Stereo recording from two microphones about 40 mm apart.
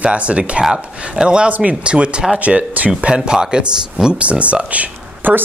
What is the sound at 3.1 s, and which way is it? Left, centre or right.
Speech, right.